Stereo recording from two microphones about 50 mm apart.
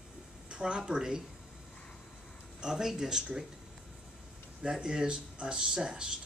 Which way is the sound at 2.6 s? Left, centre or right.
Centre.